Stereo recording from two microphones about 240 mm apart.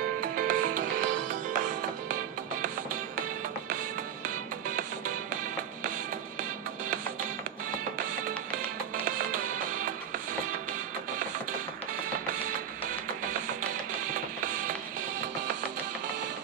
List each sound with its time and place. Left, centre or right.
0.2 s music: right
9.0 s music: right